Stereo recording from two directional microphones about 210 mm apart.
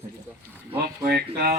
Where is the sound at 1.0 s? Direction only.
45° right (ahead or behind).